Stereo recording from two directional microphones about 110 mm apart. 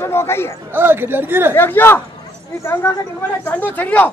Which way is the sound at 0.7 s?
20° right (ahead or behind).